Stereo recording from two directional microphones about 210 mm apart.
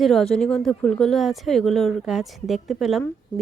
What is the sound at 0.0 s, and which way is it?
Speech, centre (ahead or behind).